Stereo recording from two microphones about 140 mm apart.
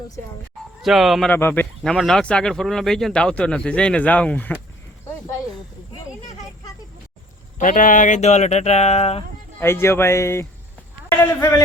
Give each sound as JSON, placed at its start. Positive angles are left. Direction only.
{"t": 0.8, "sound": "speech", "side_deg": 0}
{"t": 1.3, "sound": "speech", "side_deg": 15}
{"t": 1.8, "sound": "speech", "side_deg": 0}
{"t": 7.6, "sound": "speech", "side_deg": 70}
{"t": 9.6, "sound": "a man's voice", "side_deg": 15}